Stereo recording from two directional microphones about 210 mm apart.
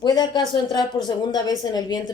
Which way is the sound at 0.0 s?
20° left (ahead or behind).